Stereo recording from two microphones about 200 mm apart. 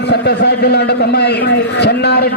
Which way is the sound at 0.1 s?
55° left (ahead or behind).